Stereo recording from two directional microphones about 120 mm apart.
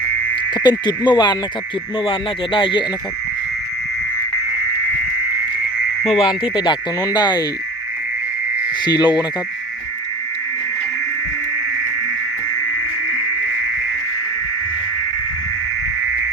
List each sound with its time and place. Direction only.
0.5 s speech: 35° left (ahead or behind)
6.1 s speech: 45° left (ahead or behind)
8.8 s speech: 35° left (ahead or behind)